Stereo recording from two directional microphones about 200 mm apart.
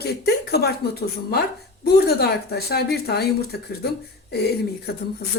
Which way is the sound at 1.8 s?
55° left (ahead or behind).